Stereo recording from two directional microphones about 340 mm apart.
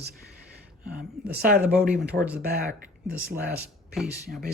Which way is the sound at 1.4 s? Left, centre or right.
Right.